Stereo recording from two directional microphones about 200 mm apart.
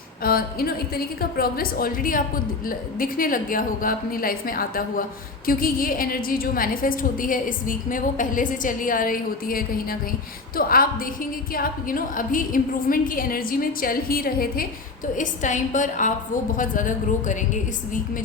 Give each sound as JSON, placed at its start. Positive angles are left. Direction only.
{"t": 0.2, "sound": "a woman's voice", "side_deg": 45}